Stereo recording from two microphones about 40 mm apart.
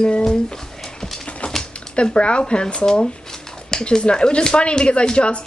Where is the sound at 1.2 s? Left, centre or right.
Left.